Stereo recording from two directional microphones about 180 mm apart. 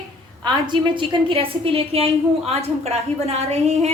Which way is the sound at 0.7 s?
30° right (ahead or behind).